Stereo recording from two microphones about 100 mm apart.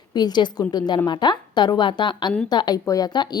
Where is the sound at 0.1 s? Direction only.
45° left (ahead or behind).